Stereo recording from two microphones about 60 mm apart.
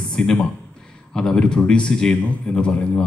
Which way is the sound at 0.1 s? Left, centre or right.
Centre.